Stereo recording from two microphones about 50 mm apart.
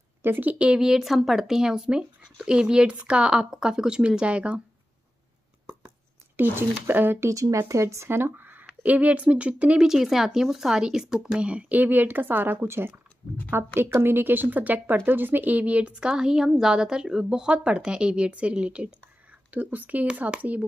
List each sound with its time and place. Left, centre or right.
0.2 s speech: right
0.5 s a woman's voice: right
0.7 s speech: centre
6.5 s a woman's voice: right
7.2 s speech: right
8.1 s speech: right
8.8 s a woman's voice: right
9.8 s speech: centre
11.3 s a woman's voice: right
11.7 s a woman's voice: right
19.5 s a woman's voice: right